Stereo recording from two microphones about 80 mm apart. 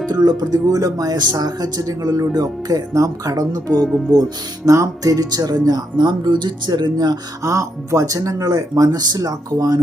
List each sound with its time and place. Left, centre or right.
0.3 s speech: right
7.5 s speech: right